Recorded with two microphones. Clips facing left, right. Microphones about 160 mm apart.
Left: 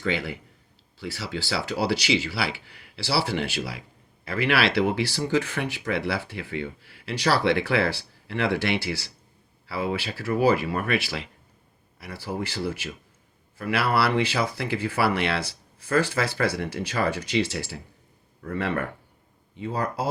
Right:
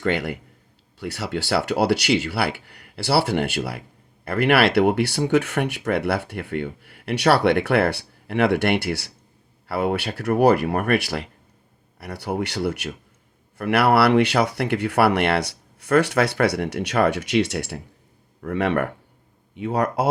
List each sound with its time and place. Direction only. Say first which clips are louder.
0.0 s speech: right 5 dB; 60° right (ahead or behind)